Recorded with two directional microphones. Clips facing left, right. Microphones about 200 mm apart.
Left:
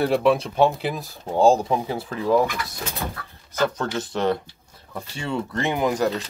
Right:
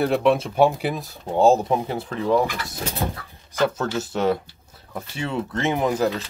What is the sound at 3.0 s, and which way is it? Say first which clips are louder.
Speech: right 5 dB; 30° right (ahead or behind).